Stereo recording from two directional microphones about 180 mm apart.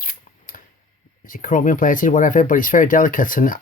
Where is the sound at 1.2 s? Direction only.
50° left (ahead or behind).